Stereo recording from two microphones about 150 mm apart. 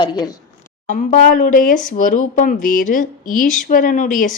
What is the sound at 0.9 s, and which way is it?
A woman's voice, 60° left (ahead or behind).